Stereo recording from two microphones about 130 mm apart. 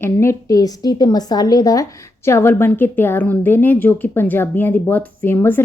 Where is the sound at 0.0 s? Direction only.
20° left (ahead or behind).